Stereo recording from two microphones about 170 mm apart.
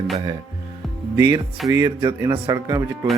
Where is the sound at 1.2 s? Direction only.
20° right (ahead or behind).